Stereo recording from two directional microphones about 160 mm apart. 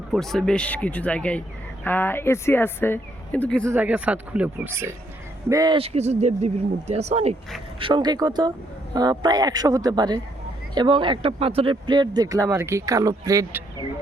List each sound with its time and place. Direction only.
0.1 s a man's voice: centre (ahead or behind)
3.7 s speech: 10° right (ahead or behind)
5.7 s speech: 40° right (ahead or behind)
7.8 s speech: 30° right (ahead or behind)